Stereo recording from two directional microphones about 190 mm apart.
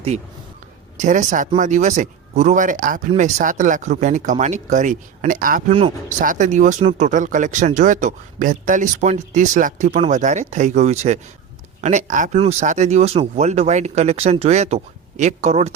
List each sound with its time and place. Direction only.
0.9 s speech: 40° right (ahead or behind)